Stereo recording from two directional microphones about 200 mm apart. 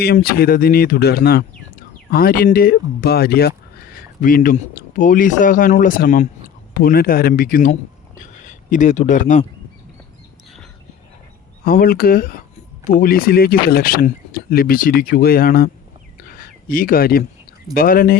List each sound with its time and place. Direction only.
0.0 s a man's voice: 50° left (ahead or behind)
11.6 s speech: 45° left (ahead or behind)
16.3 s a sound: 45° left (ahead or behind)
17.7 s speech: 45° left (ahead or behind)